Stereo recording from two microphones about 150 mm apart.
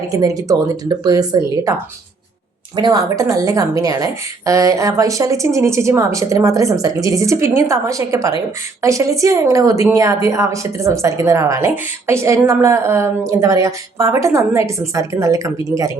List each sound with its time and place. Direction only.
0.1 s a woman's voice: 25° right (ahead or behind)